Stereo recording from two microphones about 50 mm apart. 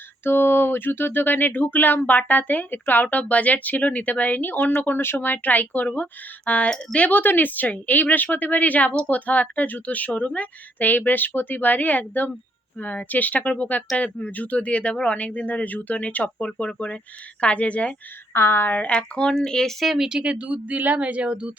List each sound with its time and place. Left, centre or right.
0.3 s speech: left
18.3 s speech: left
18.7 s speech: left; by 19.7 s centre
20.0 s speech: centre
20.2 s speech: right